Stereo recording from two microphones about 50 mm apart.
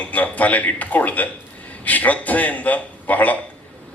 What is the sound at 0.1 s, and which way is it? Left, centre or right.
A man's voice, left.